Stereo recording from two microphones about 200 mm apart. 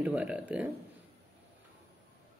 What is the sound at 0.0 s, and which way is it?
Speech, 5° right (ahead or behind).